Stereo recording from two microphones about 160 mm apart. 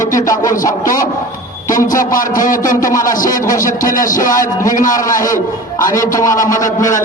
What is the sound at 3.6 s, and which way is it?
A man's voice, 60° left (ahead or behind).